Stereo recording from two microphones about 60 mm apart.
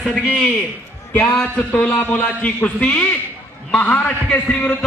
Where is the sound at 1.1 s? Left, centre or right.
Left.